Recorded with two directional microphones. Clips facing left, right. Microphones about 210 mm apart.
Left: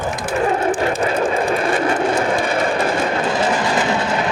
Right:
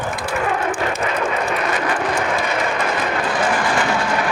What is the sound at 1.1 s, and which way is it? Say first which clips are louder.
Vehicle: left 3 dB; 30° left (ahead or behind).